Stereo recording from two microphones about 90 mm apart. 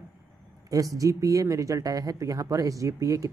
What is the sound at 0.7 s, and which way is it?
Speech, 40° right (ahead or behind).